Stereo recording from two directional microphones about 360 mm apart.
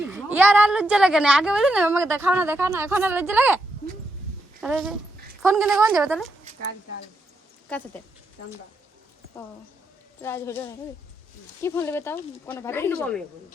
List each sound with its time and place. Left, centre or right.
0.0 s a woman's voice: centre
4.6 s a woman's voice: centre
10.2 s speech: centre